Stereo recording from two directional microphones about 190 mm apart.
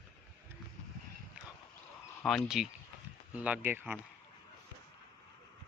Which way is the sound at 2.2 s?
Centre (ahead or behind).